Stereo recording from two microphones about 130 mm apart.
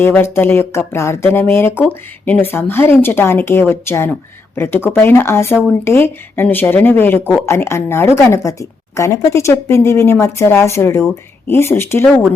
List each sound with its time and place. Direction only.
0.0 s a woman's voice: 20° left (ahead or behind)